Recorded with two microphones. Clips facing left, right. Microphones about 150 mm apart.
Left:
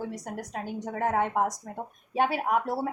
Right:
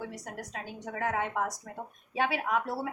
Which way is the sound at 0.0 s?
40° left (ahead or behind).